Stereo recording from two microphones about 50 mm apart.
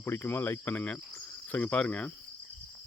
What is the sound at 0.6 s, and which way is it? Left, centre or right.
Speech, left.